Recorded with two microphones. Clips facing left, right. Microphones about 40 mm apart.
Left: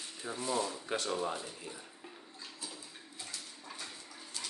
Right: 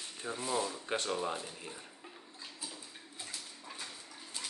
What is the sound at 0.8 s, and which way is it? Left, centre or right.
Speech, right.